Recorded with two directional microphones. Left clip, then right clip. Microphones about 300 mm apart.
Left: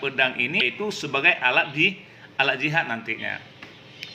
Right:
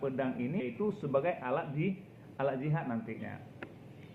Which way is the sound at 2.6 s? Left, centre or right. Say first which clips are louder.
Left 14 dB; left.